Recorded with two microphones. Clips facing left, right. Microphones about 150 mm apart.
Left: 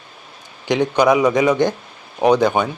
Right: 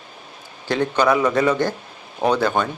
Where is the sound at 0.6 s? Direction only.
15° left (ahead or behind).